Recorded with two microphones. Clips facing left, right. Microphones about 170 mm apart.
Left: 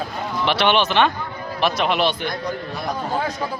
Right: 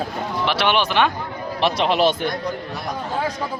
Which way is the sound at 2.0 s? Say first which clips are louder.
Right 3 dB; 45° right (ahead or behind).